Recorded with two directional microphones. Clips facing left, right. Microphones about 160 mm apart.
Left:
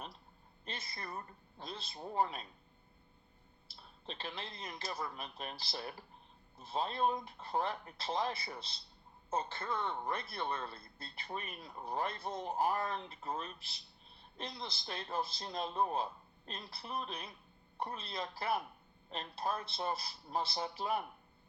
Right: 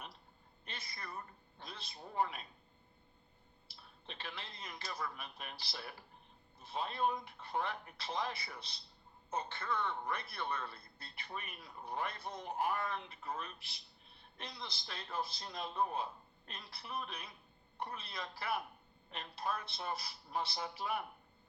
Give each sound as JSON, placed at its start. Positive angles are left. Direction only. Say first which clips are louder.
{"t": 0.6, "sound": "a woman's voice", "louder": "left 4 dB", "side_deg": 25}
{"t": 4.0, "sound": "speech", "louder": "left 4 dB", "side_deg": 35}
{"t": 5.2, "sound": "a man's voice", "louder": "left 4 dB", "side_deg": 35}